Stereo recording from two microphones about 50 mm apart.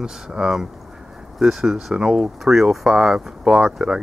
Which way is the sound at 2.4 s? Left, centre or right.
Centre.